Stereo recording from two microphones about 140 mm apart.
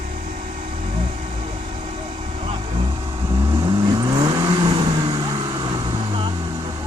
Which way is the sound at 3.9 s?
30° right (ahead or behind).